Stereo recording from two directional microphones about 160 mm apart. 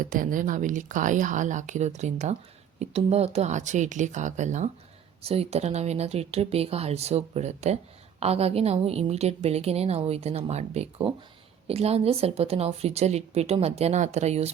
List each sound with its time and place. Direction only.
0.0 s a woman's voice: 55° right (ahead or behind)